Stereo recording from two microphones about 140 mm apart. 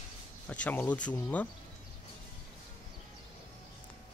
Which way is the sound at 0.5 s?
10° left (ahead or behind).